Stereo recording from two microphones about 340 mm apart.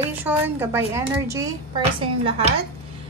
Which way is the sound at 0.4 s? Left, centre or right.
Centre.